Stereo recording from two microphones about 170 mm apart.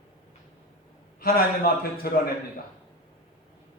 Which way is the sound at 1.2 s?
60° left (ahead or behind).